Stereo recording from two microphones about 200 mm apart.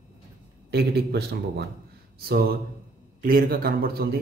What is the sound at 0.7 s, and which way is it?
Speech, 55° right (ahead or behind).